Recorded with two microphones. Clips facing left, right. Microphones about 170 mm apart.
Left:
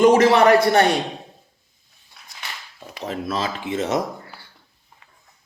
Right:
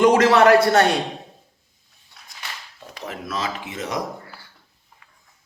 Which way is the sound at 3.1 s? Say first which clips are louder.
Left 3 dB; 30° left (ahead or behind).